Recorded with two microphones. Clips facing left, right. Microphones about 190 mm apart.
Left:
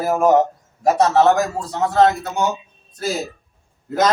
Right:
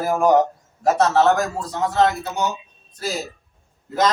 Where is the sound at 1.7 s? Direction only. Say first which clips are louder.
Left 4 dB; 40° left (ahead or behind).